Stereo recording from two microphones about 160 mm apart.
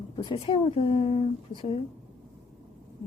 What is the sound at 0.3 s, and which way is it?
A woman's voice, 30° left (ahead or behind).